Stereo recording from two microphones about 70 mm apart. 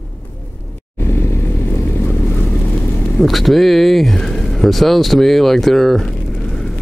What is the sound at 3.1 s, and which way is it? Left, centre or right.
Speech, centre.